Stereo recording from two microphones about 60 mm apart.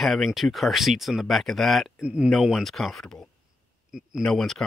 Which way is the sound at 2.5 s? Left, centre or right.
Centre.